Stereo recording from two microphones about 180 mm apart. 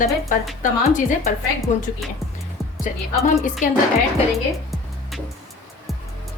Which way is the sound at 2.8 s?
45° left (ahead or behind).